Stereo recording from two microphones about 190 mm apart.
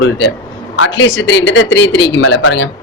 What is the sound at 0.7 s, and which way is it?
Speech, 90° left.